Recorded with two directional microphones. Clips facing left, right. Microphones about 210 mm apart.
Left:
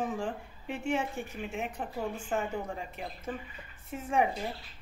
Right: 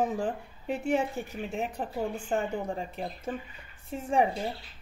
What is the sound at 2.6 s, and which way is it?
Speech, 35° right (ahead or behind).